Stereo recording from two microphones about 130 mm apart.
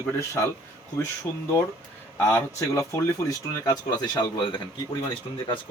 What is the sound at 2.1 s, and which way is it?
Speech, 20° left (ahead or behind).